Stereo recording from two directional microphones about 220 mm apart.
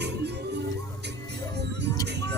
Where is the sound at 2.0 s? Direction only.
50° right (ahead or behind).